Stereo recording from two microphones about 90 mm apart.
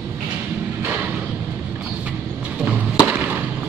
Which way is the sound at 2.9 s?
15° right (ahead or behind).